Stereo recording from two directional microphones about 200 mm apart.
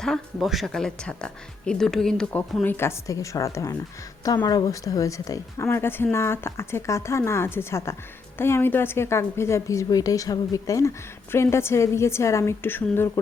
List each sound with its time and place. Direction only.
0.0 s a woman's voice: centre (ahead or behind)